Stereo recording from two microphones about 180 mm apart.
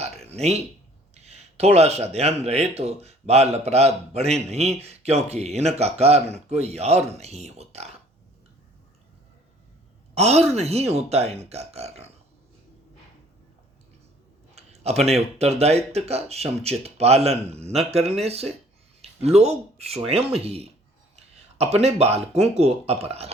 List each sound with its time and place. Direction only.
0.3 s speech: 35° right (ahead or behind)
10.2 s speech: 35° right (ahead or behind)
14.5 s speech: 35° right (ahead or behind)